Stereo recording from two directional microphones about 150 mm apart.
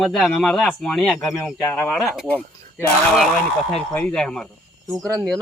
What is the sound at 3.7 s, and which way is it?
Speech, 5° left (ahead or behind).